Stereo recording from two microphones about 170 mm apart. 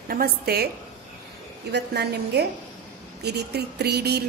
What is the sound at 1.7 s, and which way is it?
A woman's voice, 75° right (ahead or behind).